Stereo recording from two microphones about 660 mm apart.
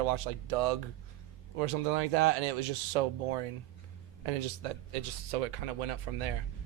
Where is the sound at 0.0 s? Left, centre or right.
Right.